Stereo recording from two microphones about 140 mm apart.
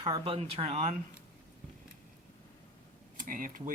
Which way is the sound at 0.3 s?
50° right (ahead or behind).